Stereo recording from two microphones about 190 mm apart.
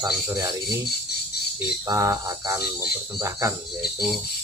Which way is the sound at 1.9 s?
15° right (ahead or behind).